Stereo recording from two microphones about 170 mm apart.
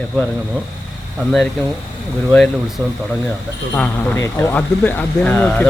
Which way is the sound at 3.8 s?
15° left (ahead or behind).